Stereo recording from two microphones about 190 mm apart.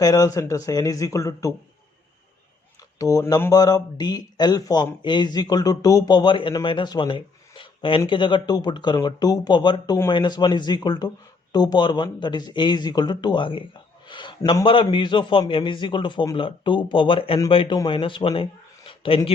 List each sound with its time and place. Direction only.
0.0 s speech: 20° left (ahead or behind)
3.0 s speech: 20° left (ahead or behind)
18.9 s a sound: 30° left (ahead or behind)